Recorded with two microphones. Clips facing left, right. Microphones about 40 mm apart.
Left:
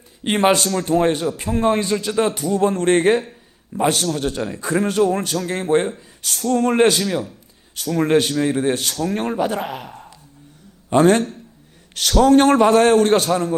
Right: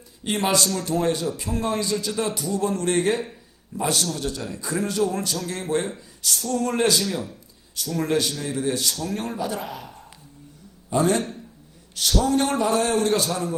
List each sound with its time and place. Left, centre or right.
0.3 s a man's voice: left